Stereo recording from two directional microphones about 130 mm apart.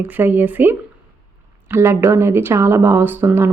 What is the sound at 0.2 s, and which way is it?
Speech, 15° right (ahead or behind).